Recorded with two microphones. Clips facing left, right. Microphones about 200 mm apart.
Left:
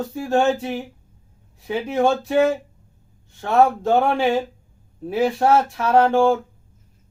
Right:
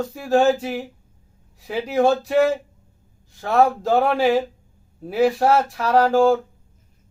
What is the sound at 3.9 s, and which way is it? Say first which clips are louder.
Speech: even; 30° left (ahead or behind).